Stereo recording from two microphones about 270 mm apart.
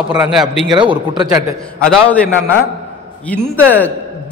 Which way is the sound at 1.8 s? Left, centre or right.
Centre.